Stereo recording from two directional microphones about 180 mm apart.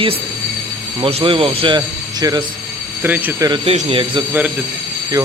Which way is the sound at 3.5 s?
35° right (ahead or behind).